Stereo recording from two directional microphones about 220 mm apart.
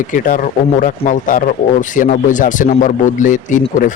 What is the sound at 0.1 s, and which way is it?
A man's voice, 40° left (ahead or behind).